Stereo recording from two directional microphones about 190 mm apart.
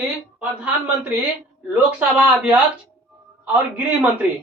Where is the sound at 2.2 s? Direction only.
5° right (ahead or behind).